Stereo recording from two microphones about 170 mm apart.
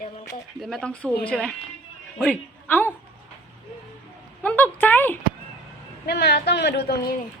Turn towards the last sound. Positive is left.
turn(degrees=65)  # may be behind; listen again after turning